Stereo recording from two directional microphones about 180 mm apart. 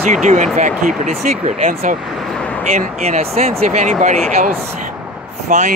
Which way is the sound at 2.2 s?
5° left (ahead or behind).